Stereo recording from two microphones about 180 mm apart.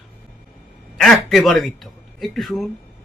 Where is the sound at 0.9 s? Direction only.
Centre (ahead or behind).